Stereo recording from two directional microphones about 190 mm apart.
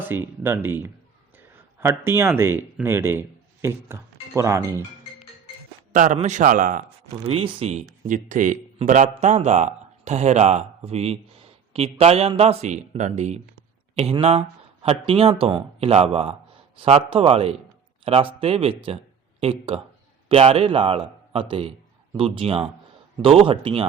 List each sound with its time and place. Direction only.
0.0 s speech: 10° right (ahead or behind)
5.9 s a man's voice: 40° right (ahead or behind)
7.3 s a man's voice: 30° right (ahead or behind)